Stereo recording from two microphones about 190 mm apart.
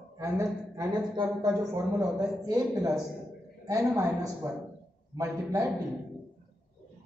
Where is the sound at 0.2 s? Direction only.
15° right (ahead or behind).